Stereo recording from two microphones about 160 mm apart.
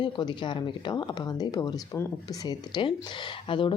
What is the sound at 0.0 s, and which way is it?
Speech, 30° left (ahead or behind).